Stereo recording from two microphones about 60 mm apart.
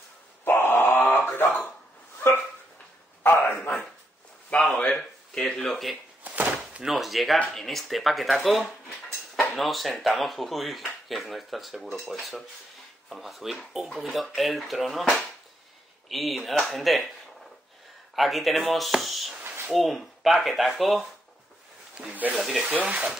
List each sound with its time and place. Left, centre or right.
0.5 s a sound: left
3.4 s bow-wow: left
4.5 s a sound: left
4.9 s a sound: centre
6.2 s chop: right
6.8 s speech: centre
16.1 s speech: centre
18.1 s speech: centre
22.3 s speech: centre
22.8 s speech: centre